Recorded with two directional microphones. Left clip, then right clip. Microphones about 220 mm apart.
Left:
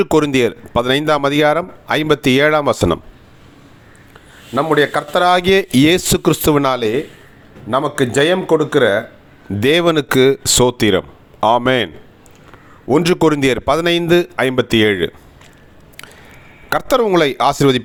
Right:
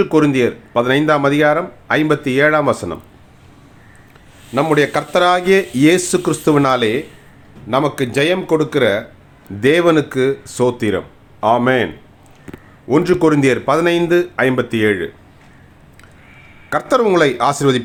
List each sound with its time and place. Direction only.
0.0 s speech: 45° left (ahead or behind)
4.5 s a man's voice: centre (ahead or behind)
5.2 s speech: 40° left (ahead or behind)
7.7 s speech: 10° left (ahead or behind)
9.6 s speech: 40° left (ahead or behind)
12.9 s speech: 35° left (ahead or behind)
16.6 s speech: 40° left (ahead or behind)